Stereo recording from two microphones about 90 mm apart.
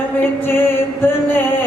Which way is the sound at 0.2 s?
25° left (ahead or behind).